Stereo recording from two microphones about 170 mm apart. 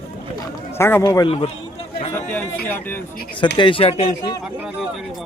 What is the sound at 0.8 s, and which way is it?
Speech, 15° left (ahead or behind).